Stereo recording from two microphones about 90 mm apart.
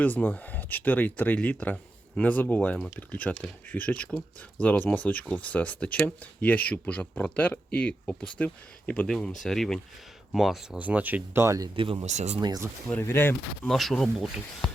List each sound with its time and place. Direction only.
0.0 s speech: 20° left (ahead or behind); by 10.8 s centre (ahead or behind)
10.8 s speech: 15° right (ahead or behind)
11.4 s speech: 40° right (ahead or behind)
11.9 s speech: 50° right (ahead or behind)
13.0 s speech: 25° left (ahead or behind)
13.7 s speech: 5° left (ahead or behind)